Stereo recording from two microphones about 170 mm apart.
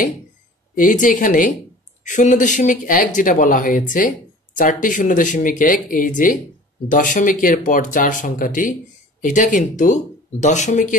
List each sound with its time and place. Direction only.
0.7 s speech: 50° left (ahead or behind)